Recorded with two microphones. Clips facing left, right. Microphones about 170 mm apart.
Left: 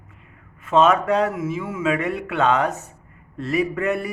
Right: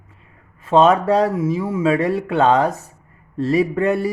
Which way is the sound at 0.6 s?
30° right (ahead or behind).